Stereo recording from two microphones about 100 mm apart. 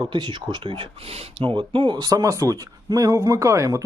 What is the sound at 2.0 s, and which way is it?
Speech, 35° right (ahead or behind).